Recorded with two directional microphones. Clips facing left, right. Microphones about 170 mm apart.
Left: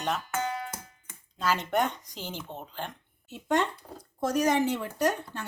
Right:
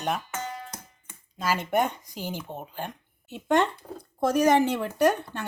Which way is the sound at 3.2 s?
65° right (ahead or behind).